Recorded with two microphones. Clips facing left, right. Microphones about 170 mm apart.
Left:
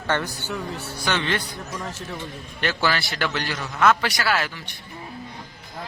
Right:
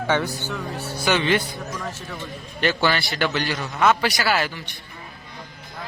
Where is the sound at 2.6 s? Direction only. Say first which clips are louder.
Right 3 dB; centre (ahead or behind).